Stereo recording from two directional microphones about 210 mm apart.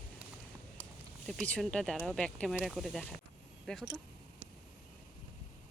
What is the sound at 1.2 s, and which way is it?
Speech, 5° left (ahead or behind).